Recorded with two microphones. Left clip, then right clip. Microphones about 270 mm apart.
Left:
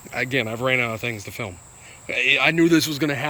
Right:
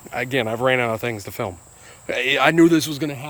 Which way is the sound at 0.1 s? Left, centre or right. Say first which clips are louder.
Right 1 dB; centre.